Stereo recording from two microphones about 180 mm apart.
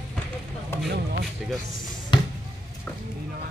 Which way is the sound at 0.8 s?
60° right (ahead or behind).